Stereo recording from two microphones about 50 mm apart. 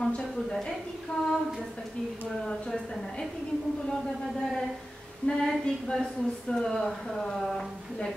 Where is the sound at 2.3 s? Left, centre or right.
Centre.